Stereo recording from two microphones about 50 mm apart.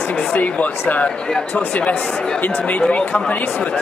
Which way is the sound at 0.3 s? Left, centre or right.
Left.